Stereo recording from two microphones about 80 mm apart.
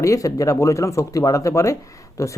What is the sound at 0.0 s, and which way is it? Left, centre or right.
Speech, left.